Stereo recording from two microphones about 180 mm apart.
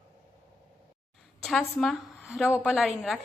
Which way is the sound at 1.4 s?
Centre (ahead or behind).